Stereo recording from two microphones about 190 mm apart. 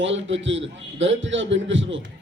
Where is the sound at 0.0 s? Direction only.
80° right.